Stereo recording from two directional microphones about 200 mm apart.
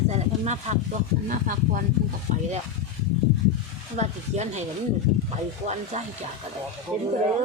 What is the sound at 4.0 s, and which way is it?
Speech, 35° right (ahead or behind).